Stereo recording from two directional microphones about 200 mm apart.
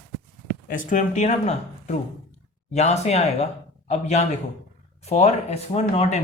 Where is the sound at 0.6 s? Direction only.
40° left (ahead or behind).